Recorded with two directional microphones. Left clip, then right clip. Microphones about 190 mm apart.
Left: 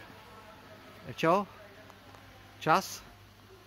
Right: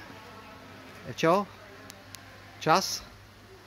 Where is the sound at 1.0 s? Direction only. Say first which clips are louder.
Right 3 dB; 5° left (ahead or behind).